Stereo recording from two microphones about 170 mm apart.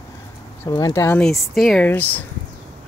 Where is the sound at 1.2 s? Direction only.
Centre (ahead or behind).